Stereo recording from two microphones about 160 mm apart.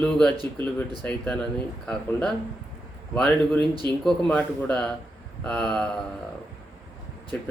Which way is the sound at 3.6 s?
25° right (ahead or behind).